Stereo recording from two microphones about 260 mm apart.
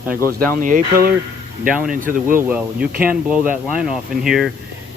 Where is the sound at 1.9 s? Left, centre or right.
Right.